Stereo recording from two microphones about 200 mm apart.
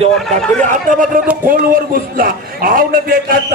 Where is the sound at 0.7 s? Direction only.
40° right (ahead or behind).